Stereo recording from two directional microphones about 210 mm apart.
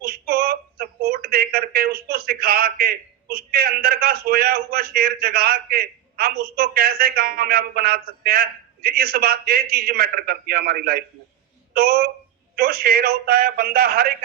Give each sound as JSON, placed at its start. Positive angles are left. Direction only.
{"t": 0.0, "sound": "speech", "side_deg": -45}